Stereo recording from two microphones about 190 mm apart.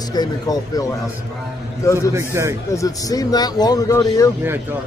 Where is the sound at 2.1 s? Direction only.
15° right (ahead or behind).